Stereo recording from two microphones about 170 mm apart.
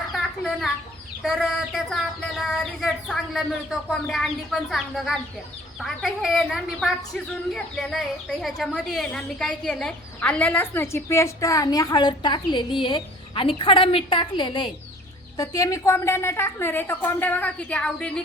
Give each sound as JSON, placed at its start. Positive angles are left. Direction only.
{"t": 0.1, "sound": "chicken", "side_deg": 0}
{"t": 1.2, "sound": "a woman's voice", "side_deg": 0}